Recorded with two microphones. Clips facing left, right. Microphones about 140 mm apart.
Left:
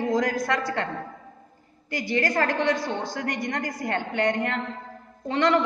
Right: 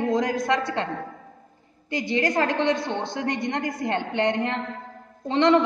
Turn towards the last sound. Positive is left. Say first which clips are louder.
# right 3 dB
turn(degrees=-20)  # may be behind; listen again after turning